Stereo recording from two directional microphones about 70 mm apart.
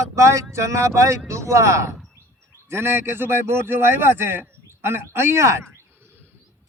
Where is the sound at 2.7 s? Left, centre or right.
Right.